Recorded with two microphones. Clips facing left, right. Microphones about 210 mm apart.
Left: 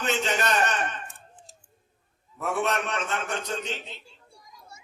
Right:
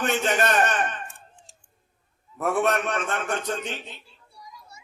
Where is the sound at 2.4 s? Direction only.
50° right (ahead or behind).